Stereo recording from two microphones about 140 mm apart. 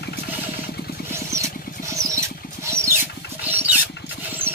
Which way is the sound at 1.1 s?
20° right (ahead or behind).